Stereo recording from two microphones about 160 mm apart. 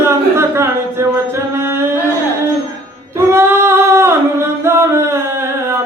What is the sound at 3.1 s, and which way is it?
Singing, 15° right (ahead or behind).